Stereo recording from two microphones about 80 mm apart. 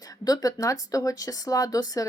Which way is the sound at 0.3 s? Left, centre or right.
Left.